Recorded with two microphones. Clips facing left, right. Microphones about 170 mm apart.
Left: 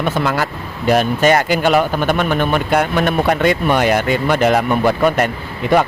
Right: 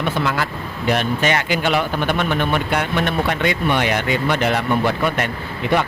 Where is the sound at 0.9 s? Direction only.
40° left (ahead or behind).